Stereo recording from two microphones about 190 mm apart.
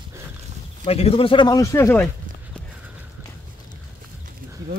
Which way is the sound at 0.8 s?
30° left (ahead or behind).